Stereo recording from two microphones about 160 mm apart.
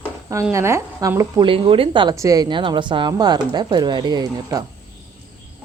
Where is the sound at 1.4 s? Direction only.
35° right (ahead or behind).